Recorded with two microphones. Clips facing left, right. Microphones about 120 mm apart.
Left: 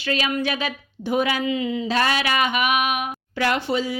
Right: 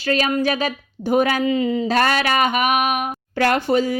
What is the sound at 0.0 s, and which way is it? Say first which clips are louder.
A woman's voice: right 5 dB; 40° right (ahead or behind).